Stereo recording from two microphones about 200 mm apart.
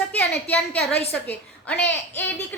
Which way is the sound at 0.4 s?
5° left (ahead or behind).